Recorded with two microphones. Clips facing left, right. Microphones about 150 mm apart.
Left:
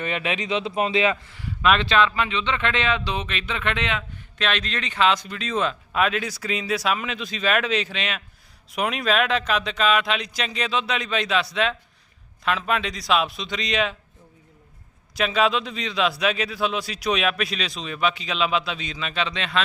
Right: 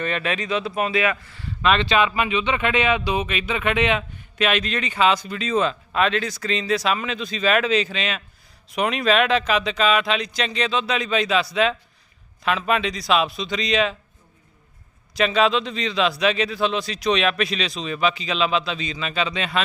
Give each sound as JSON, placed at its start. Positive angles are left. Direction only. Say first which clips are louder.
{"t": 0.0, "sound": "speech", "louder": "right 2 dB", "side_deg": 15}
{"t": 1.6, "sound": "speech", "louder": "right 1 dB", "side_deg": 0}
{"t": 2.0, "sound": "speech", "louder": "right 1 dB", "side_deg": -10}
{"t": 15.1, "sound": "speech", "louder": "right 2 dB", "side_deg": 0}